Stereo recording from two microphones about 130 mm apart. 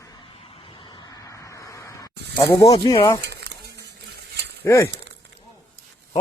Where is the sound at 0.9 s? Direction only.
30° left (ahead or behind).